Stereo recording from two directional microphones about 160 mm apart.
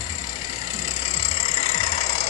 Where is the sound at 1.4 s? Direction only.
40° left (ahead or behind).